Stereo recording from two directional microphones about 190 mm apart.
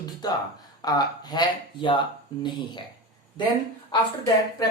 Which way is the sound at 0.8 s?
20° left (ahead or behind).